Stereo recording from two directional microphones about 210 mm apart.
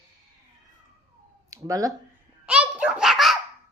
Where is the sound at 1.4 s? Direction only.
15° right (ahead or behind).